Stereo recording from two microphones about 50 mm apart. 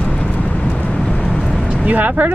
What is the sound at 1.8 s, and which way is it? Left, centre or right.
Speech, right.